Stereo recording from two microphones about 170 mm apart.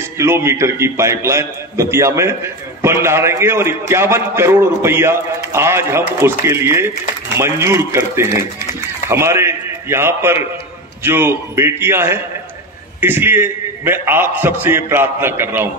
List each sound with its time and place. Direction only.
0.2 s a man's voice: 15° right (ahead or behind)